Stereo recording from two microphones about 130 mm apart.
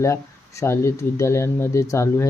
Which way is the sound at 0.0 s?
20° left (ahead or behind).